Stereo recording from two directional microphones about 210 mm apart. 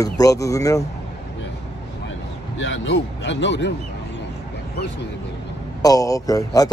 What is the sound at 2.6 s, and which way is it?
Speech, 55° left (ahead or behind).